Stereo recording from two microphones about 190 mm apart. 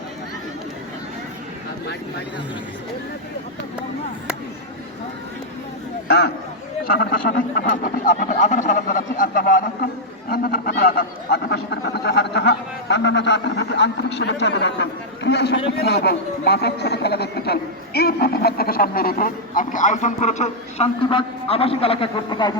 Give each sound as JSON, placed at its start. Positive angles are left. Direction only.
{"t": 6.1, "sound": "speech", "side_deg": 60}